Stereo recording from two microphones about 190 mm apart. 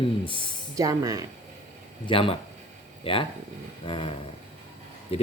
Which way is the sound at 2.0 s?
30° left (ahead or behind).